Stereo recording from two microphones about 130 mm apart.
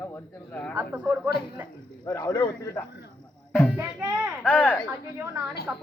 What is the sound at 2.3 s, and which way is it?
Speech, 25° left (ahead or behind).